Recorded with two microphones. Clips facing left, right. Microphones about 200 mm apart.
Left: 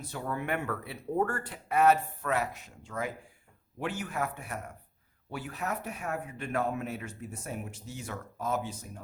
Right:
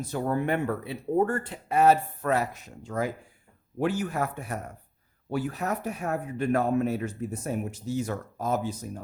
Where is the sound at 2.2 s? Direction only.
40° right (ahead or behind).